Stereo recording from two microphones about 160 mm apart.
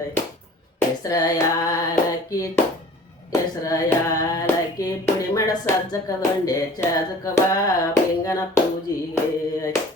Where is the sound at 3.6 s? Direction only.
20° left (ahead or behind).